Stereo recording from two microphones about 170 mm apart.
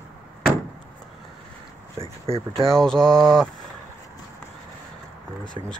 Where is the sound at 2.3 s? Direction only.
35° right (ahead or behind).